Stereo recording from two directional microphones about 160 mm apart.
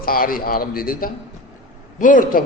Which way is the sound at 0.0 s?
65° left (ahead or behind).